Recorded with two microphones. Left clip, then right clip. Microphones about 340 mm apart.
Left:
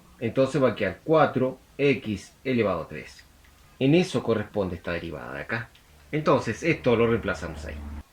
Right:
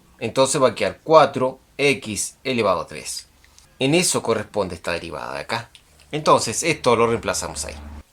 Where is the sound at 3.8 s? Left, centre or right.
Right.